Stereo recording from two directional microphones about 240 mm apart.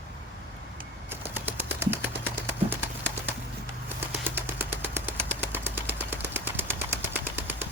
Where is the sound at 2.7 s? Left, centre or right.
Centre.